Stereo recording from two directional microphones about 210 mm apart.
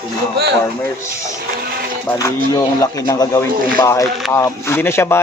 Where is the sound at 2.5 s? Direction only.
15° left (ahead or behind).